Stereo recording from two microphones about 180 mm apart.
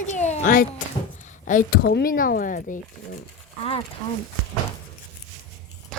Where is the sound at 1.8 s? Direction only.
60° left (ahead or behind).